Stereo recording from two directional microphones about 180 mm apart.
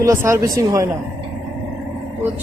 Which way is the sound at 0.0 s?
15° right (ahead or behind).